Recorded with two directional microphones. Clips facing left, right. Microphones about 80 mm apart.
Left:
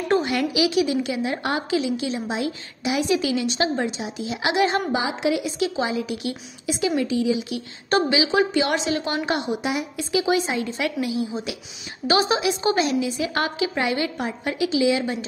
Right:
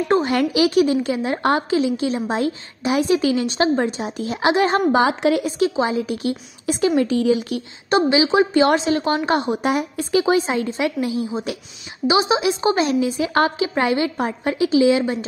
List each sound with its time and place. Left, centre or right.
0.1 s a woman's voice: right
4.4 s a woman's voice: right
5.8 s a woman's voice: right
8.1 s a woman's voice: right
12.1 s speech: centre
12.4 s a woman's voice: right